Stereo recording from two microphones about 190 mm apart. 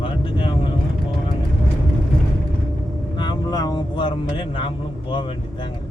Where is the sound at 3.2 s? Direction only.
20° left (ahead or behind).